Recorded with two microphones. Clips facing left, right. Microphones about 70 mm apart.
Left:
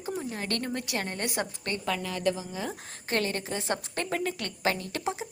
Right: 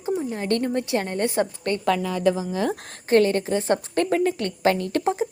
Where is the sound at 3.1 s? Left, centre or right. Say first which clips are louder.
Right 11 dB; right.